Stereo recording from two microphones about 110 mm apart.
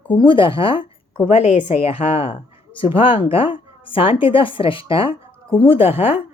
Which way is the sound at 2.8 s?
50° left (ahead or behind).